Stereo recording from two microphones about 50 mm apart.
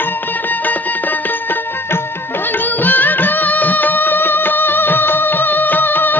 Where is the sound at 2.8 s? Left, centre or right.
Left.